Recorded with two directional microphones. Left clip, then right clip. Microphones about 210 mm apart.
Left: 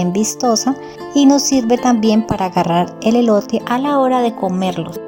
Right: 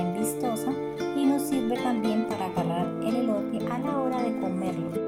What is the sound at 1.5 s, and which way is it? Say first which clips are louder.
Speech: left 13 dB; 40° left (ahead or behind).